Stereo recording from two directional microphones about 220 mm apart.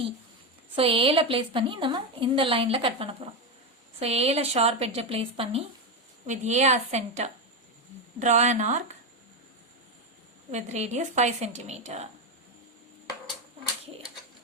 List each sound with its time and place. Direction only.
0.8 s a woman's voice: 25° right (ahead or behind)
10.5 s a woman's voice: 30° right (ahead or behind)